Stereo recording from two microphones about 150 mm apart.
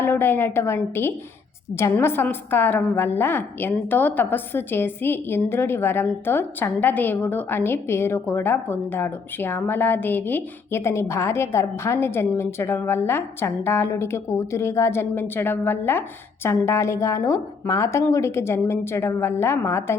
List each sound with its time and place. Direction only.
0.0 s a woman's voice: 15° left (ahead or behind)